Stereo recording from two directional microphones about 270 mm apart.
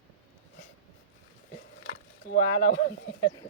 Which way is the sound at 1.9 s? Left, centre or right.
Left.